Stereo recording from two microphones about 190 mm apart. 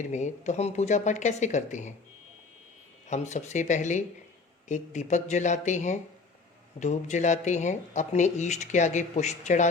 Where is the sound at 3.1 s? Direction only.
40° left (ahead or behind).